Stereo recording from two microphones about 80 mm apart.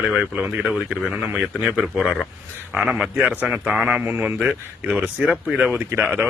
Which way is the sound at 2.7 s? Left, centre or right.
Centre.